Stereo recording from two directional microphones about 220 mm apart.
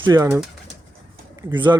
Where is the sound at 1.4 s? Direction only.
15° right (ahead or behind).